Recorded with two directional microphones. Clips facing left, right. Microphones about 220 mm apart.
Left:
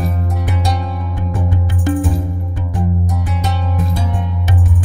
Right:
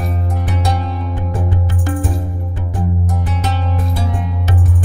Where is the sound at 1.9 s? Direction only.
Centre (ahead or behind).